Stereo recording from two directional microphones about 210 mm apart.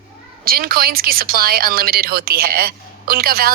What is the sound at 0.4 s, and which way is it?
A woman's voice, 45° right (ahead or behind).